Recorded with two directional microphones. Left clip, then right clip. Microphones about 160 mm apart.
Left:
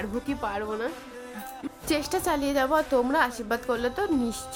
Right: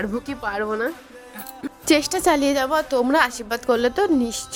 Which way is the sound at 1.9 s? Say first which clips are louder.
Right 8 dB; 45° right (ahead or behind).